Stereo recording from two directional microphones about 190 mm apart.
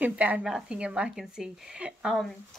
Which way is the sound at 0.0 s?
10° right (ahead or behind).